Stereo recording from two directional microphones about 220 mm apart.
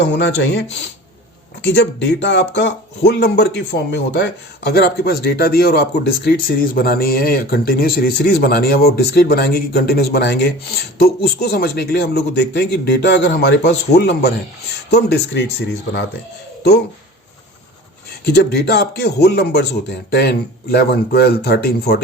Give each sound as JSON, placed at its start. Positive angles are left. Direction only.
{"t": 0.1, "sound": "speech", "side_deg": 50}
{"t": 18.3, "sound": "speech", "side_deg": 45}